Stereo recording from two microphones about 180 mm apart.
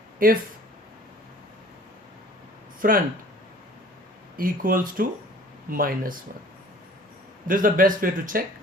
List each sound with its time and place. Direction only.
0.2 s speech: 50° right (ahead or behind)
2.8 s speech: 50° right (ahead or behind)
4.4 s speech: 50° right (ahead or behind)
7.4 s speech: 50° right (ahead or behind)